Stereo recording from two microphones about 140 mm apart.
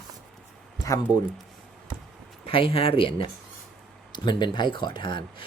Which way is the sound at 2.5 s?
40° left (ahead or behind).